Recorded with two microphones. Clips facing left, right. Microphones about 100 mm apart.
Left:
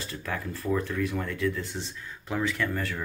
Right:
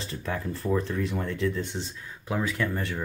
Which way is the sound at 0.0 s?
20° right (ahead or behind).